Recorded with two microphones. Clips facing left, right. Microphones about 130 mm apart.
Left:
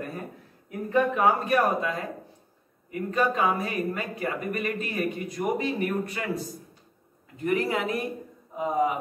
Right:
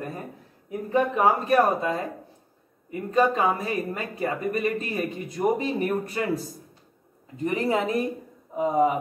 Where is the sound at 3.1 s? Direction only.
30° right (ahead or behind).